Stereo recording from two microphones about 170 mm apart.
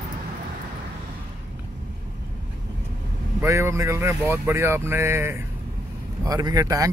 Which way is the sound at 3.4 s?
15° right (ahead or behind).